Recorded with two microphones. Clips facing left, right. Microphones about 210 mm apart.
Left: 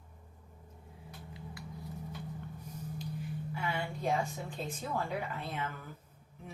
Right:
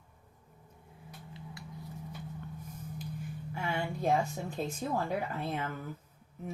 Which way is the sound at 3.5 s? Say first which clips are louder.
Right 3 dB; 45° right (ahead or behind).